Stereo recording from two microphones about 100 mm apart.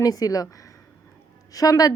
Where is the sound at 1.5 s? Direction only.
35° left (ahead or behind).